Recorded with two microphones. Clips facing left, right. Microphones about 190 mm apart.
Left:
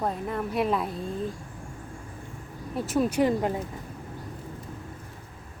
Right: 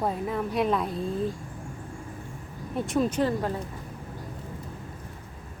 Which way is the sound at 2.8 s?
5° left (ahead or behind).